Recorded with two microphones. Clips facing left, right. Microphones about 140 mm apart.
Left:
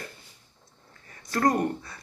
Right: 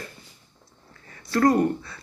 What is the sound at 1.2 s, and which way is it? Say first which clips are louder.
Speech: right 5 dB; 20° left (ahead or behind).